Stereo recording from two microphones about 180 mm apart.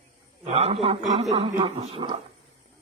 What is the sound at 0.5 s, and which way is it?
A man's voice, 35° right (ahead or behind).